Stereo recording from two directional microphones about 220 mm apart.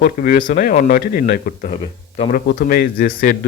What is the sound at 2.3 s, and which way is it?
A man's voice, 45° left (ahead or behind).